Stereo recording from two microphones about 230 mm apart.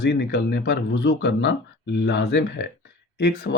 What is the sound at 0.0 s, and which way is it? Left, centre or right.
Speech, left.